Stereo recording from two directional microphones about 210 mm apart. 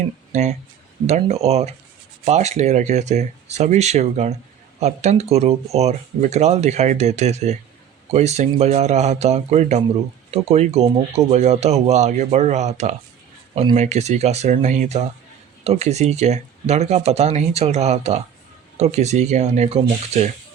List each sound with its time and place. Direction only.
1.0 s speech: 30° right (ahead or behind)